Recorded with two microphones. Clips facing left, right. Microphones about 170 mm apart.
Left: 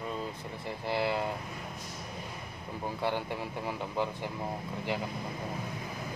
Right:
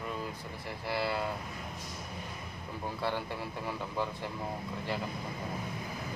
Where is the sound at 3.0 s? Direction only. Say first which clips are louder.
Left 2 dB; 15° left (ahead or behind).